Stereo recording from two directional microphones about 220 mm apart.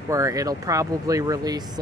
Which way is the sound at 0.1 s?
15° right (ahead or behind).